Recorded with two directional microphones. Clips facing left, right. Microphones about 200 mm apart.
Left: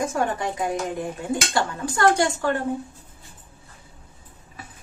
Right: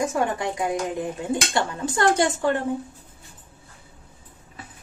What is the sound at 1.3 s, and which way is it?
Speech, 20° right (ahead or behind).